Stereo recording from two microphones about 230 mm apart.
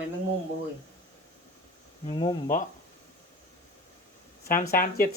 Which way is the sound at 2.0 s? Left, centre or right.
Centre.